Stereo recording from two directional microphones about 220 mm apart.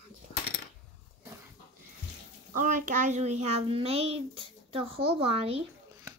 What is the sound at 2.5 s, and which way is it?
A child's voice, 35° right (ahead or behind).